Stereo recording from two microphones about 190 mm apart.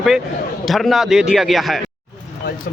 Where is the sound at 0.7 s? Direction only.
Centre (ahead or behind).